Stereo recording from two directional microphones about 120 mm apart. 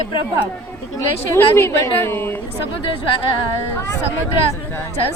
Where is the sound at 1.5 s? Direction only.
20° left (ahead or behind).